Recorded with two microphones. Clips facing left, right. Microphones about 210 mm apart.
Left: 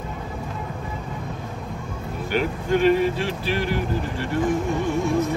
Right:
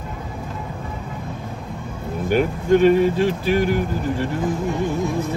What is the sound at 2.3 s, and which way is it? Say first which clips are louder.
Speech: right 5 dB; 45° right (ahead or behind).